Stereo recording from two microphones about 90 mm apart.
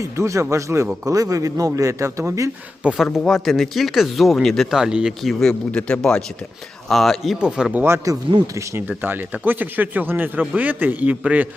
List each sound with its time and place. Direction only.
0.0 s speech: 35° right (ahead or behind)
3.0 s speech: 5° right (ahead or behind)
7.3 s a man's voice: 10° right (ahead or behind)
7.7 s a man's voice: 20° right (ahead or behind)